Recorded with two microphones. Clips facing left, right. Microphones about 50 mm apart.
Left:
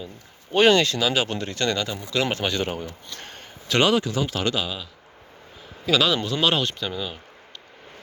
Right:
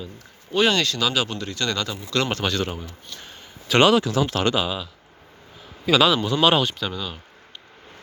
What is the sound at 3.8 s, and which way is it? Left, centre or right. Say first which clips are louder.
Speech: right 4 dB; right.